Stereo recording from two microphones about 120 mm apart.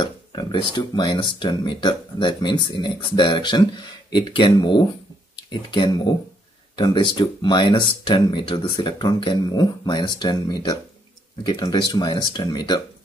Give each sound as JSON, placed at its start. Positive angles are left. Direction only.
{"t": 0.0, "sound": "speech", "side_deg": 40}